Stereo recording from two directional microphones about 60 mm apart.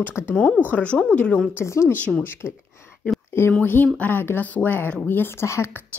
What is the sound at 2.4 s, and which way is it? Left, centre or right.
Speech, centre.